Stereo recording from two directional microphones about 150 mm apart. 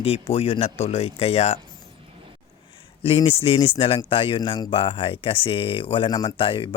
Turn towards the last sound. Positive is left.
turn(degrees=35)  # may be behind; listen again after turning